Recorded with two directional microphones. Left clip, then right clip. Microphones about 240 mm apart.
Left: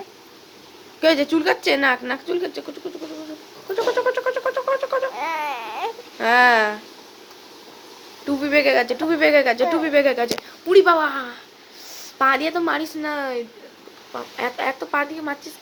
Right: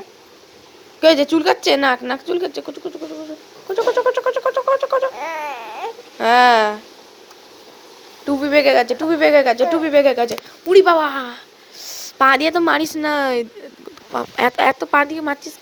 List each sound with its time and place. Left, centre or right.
1.0 s speech: centre
3.8 s a sound: centre
5.1 s babbling: centre
6.1 s speech: right
8.3 s speech: centre; by 15.4 s right